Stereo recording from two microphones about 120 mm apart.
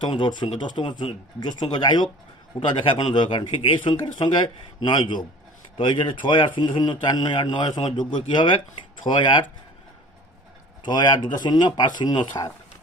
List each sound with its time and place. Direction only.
0.0 s speech: 40° left (ahead or behind)
10.8 s speech: 35° left (ahead or behind)